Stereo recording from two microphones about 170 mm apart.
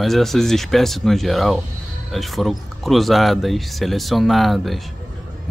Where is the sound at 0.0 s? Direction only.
Centre (ahead or behind).